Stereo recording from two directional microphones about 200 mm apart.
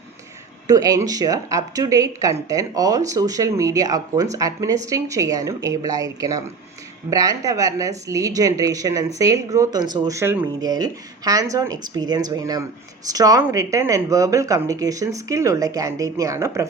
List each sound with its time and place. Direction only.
0.7 s speech: 15° right (ahead or behind)